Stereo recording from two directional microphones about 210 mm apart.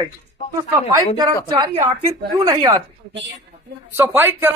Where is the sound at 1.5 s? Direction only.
20° right (ahead or behind).